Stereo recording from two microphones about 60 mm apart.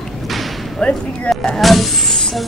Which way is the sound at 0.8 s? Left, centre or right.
Left.